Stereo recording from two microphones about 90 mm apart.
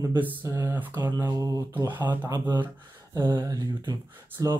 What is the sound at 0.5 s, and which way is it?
Mantra, 40° right (ahead or behind).